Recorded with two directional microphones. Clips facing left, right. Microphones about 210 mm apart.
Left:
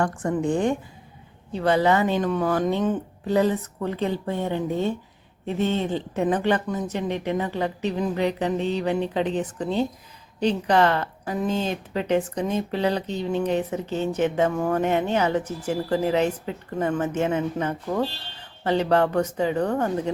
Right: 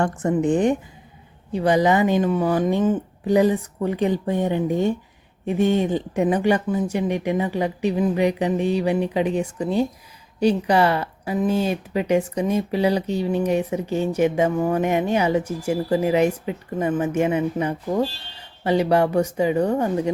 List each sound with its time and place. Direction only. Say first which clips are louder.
0.0 s a woman's voice: right 3 dB; 25° right (ahead or behind)